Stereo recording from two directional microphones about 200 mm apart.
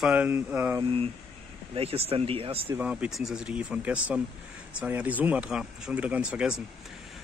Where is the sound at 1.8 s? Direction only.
30° right (ahead or behind).